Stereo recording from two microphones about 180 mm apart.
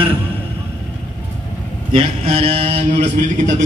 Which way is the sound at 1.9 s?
30° right (ahead or behind).